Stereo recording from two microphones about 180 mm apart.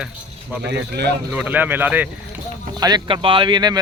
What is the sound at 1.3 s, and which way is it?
Speech, 10° right (ahead or behind).